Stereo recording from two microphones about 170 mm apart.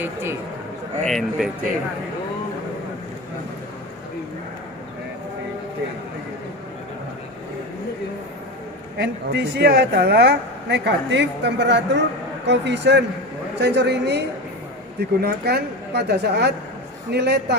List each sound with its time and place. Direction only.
0.0 s speech: 15° right (ahead or behind)
1.0 s speech: centre (ahead or behind)
9.0 s a woman's voice: 80° right